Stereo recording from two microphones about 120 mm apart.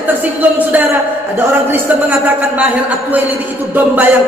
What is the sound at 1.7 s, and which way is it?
Speech, 15° right (ahead or behind).